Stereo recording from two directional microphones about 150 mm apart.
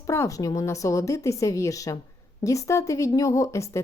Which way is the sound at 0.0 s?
20° left (ahead or behind).